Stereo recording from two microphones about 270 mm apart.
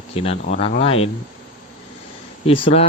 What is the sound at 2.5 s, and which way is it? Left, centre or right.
Speech, centre.